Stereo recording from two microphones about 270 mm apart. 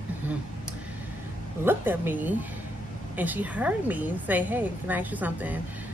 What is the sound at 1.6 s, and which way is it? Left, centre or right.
A woman's voice, centre.